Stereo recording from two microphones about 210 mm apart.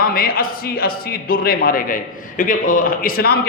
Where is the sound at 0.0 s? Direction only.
45° left (ahead or behind).